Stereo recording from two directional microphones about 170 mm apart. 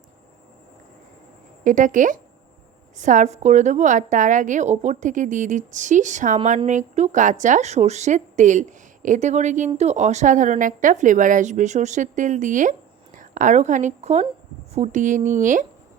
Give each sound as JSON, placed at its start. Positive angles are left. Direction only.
{"t": 1.6, "sound": "a woman's voice", "side_deg": -50}